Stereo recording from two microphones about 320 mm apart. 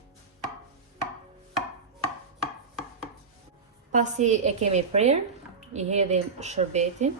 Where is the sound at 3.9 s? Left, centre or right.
Right.